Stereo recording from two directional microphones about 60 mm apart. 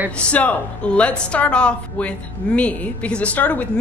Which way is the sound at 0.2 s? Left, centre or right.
Left.